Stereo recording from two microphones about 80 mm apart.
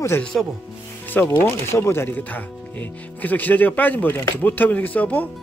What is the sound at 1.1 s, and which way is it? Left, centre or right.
Speech, left.